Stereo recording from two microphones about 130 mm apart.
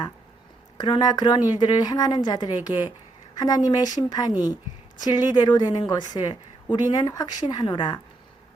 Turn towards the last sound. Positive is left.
turn(degrees=35)  # may be behind; listen again after turning